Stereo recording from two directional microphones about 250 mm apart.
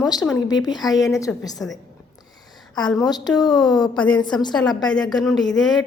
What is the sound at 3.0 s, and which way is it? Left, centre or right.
A woman's voice, centre.